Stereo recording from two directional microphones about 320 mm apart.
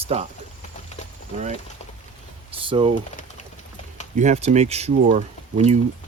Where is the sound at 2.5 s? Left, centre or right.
Centre.